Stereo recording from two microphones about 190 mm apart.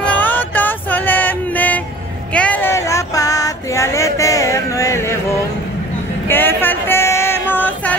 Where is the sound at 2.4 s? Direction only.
5° left (ahead or behind).